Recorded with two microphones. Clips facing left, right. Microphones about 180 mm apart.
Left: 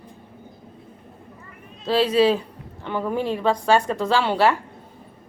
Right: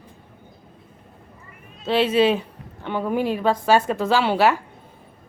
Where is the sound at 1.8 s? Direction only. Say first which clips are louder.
Even; 25° right (ahead or behind).